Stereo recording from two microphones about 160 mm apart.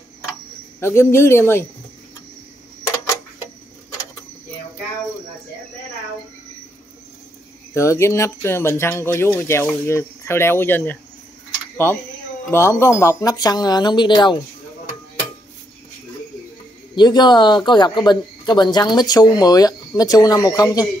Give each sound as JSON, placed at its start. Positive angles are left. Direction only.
{"t": 0.7, "sound": "speech", "side_deg": 15}
{"t": 7.7, "sound": "speech", "side_deg": 20}
{"t": 16.9, "sound": "speech", "side_deg": 25}